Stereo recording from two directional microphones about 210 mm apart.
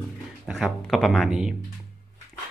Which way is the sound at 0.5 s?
Centre (ahead or behind).